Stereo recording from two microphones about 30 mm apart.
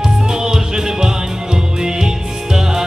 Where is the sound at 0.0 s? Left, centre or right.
Right.